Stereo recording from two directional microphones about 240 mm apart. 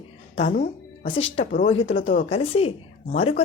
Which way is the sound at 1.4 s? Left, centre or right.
Left.